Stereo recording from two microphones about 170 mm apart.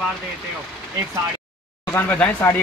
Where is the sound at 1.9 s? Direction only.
10° left (ahead or behind).